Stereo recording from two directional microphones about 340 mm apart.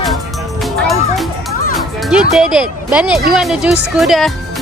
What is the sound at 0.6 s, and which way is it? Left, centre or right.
Music, centre.